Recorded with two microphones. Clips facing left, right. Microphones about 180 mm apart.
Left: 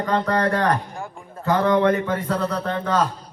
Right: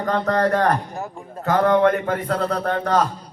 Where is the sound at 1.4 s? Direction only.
55° right (ahead or behind).